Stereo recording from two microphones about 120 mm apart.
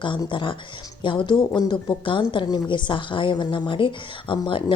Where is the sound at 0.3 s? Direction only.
45° left (ahead or behind).